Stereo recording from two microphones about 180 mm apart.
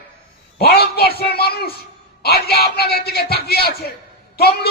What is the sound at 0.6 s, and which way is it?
A man's voice, 60° left (ahead or behind).